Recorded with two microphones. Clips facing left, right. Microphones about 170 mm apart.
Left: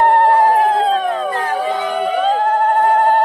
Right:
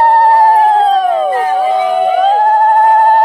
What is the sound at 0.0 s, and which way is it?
Siren, 35° right (ahead or behind).